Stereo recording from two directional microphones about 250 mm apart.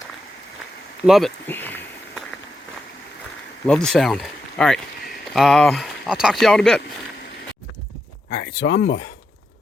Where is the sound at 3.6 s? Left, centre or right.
Centre.